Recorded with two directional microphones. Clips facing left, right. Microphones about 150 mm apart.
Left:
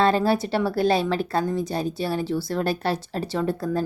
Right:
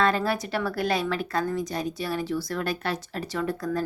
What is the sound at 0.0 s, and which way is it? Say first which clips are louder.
A woman's voice: left 4 dB; 30° left (ahead or behind).